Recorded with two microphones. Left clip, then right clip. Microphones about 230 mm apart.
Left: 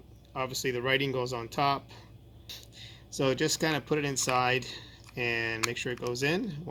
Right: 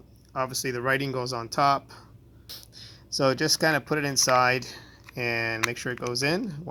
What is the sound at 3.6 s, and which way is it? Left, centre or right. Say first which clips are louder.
Speech: right 5 dB; right.